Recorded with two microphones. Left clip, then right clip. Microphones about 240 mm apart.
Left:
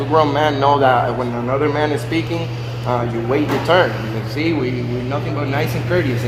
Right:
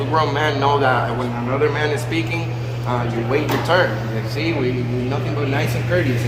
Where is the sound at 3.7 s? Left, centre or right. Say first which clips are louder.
Left 3 dB; left.